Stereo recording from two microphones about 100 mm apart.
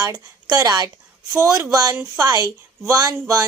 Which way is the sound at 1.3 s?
30° right (ahead or behind).